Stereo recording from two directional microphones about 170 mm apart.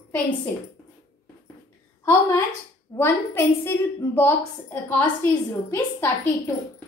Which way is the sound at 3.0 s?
15° left (ahead or behind).